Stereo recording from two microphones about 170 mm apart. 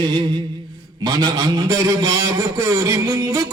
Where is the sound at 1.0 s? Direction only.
20° right (ahead or behind).